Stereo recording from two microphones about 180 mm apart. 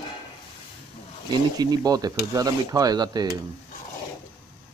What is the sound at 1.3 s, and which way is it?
Speech, 20° right (ahead or behind).